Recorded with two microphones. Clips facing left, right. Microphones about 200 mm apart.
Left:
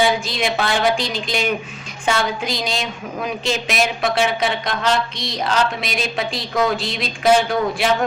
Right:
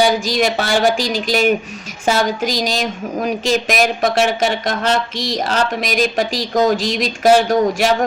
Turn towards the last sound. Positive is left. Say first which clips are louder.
# right 5 dB
turn(degrees=-40)  # may be behind; listen again after turning